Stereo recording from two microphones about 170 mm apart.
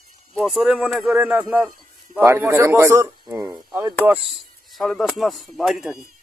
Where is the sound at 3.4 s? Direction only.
Centre (ahead or behind).